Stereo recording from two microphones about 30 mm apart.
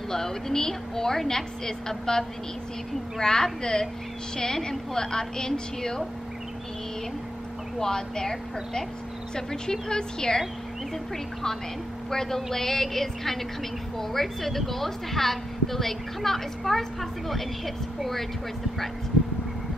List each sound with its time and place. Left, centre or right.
0.1 s a woman's voice: centre
4.5 s a woman's voice: left
7.8 s a woman's voice: centre
12.1 s a woman's voice: centre